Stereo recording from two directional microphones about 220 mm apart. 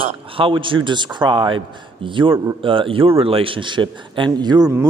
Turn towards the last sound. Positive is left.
turn(degrees=-20)  # may be behind; listen again after turning